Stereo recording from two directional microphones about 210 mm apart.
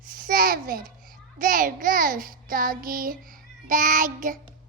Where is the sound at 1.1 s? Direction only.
40° right (ahead or behind).